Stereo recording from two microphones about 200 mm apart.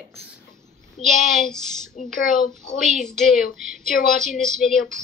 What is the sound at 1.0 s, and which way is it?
Speech, centre (ahead or behind).